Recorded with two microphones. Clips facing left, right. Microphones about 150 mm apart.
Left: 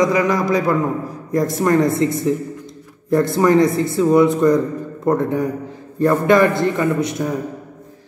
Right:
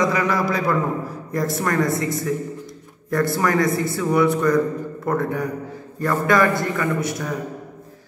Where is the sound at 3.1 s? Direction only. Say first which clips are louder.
Left 6 dB; 25° left (ahead or behind).